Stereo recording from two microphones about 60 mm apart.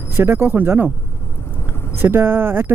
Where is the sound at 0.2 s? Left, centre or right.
Right.